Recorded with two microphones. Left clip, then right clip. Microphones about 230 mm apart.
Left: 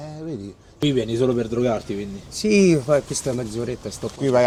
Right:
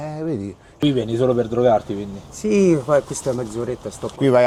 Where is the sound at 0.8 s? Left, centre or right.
Centre.